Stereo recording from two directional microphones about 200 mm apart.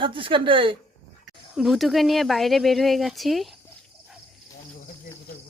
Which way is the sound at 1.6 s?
Centre (ahead or behind).